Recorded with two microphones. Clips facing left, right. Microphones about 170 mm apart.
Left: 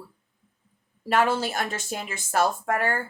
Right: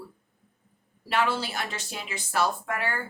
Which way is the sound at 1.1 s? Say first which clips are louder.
Left 4 dB; 45° left (ahead or behind).